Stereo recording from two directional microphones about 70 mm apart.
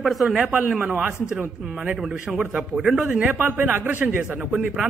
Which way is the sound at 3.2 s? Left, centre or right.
Right.